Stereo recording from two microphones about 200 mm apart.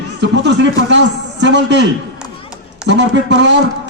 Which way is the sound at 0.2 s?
60° right (ahead or behind).